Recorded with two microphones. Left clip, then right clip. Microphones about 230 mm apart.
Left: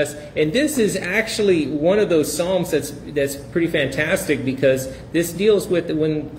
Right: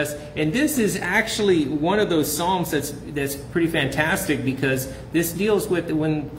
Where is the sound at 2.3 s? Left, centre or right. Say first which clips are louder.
Left 2 dB; centre.